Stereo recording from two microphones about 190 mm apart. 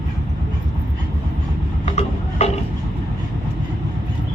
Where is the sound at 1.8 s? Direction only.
35° left (ahead or behind).